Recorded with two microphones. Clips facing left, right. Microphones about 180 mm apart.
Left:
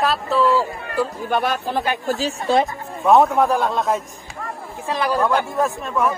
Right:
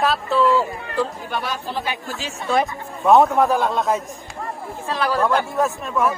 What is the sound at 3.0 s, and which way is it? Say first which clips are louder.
Speech: even; centre (ahead or behind).